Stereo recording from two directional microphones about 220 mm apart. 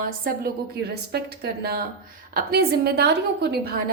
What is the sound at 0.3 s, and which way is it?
A woman's voice, 45° right (ahead or behind).